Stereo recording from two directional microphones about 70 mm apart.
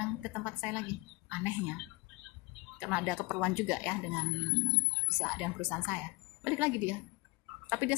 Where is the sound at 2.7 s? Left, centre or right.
Centre.